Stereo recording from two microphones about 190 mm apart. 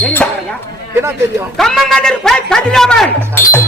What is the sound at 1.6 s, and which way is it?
A man's voice, centre (ahead or behind).